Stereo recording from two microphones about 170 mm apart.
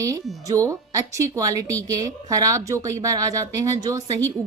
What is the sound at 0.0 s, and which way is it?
Speech, 20° right (ahead or behind).